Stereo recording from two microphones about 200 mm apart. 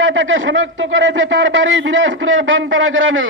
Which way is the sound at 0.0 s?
70° right (ahead or behind).